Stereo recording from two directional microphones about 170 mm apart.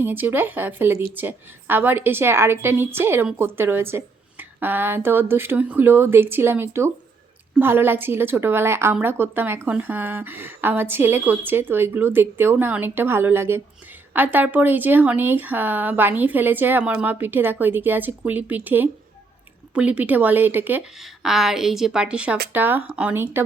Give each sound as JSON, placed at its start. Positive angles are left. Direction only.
{"t": 0.0, "sound": "a woman's voice", "side_deg": -10}